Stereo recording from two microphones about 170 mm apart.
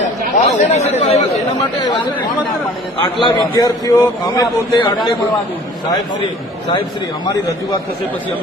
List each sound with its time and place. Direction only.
0.3 s speech: 45° left (ahead or behind)
3.0 s a man's voice: 25° left (ahead or behind)